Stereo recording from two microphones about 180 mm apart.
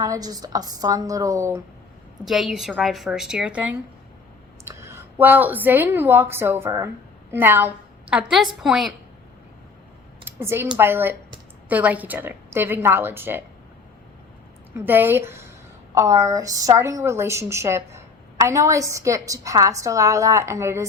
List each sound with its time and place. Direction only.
0.0 s a woman's voice: 20° right (ahead or behind)
2.2 s a woman's voice: centre (ahead or behind)
10.2 s a woman's voice: 15° right (ahead or behind)
14.8 s a woman's voice: 10° right (ahead or behind)